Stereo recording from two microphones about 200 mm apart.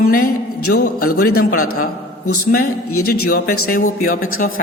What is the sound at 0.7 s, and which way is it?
A man's voice, 45° left (ahead or behind).